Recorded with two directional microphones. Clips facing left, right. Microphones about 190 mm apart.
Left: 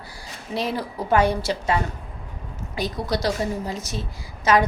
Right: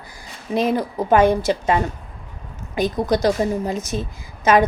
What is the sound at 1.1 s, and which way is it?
Speech, 20° right (ahead or behind).